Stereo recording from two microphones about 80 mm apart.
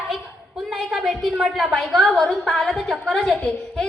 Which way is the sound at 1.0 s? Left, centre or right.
Centre.